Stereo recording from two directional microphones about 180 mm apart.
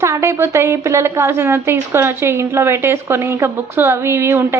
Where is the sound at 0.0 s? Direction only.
15° right (ahead or behind).